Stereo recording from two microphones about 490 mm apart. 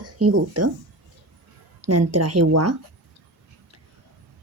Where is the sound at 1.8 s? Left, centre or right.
Right.